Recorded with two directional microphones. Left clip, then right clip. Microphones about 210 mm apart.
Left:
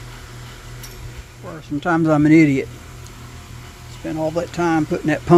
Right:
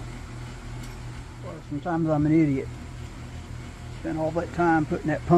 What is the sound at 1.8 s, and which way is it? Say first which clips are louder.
Speech: left 9 dB; 55° left (ahead or behind).